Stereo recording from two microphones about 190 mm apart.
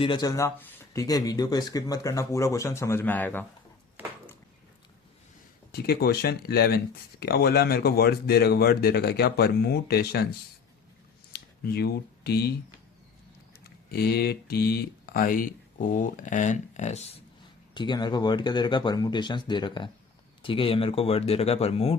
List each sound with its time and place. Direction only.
0.0 s speech: 25° left (ahead or behind)
5.7 s speech: 55° left (ahead or behind)
11.3 s a sound: 55° left (ahead or behind)
13.9 s speech: 55° left (ahead or behind); by 21.9 s 30° left (ahead or behind)